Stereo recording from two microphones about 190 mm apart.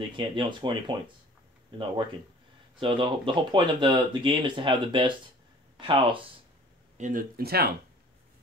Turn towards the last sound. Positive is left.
turn(degrees=-55)  # may be behind; listen again after turning